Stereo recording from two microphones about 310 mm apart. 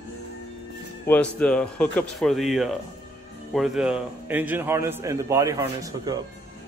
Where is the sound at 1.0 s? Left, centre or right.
Centre.